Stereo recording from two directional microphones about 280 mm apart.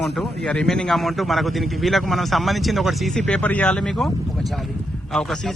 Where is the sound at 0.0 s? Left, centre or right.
Centre.